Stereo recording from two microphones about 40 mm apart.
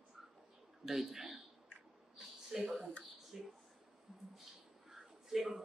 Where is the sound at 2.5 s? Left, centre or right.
Centre.